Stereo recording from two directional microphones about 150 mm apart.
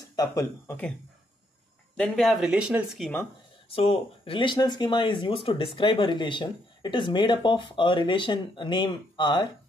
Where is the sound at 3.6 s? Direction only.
40° left (ahead or behind).